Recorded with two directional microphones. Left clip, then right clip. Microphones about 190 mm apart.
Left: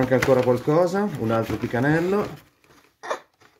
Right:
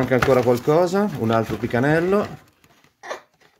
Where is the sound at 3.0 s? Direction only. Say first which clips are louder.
Left 3 dB; 25° left (ahead or behind).